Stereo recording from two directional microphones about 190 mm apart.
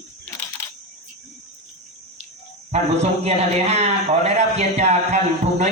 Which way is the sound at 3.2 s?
35° right (ahead or behind).